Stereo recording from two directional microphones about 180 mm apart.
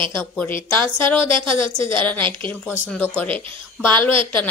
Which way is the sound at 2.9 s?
5° left (ahead or behind).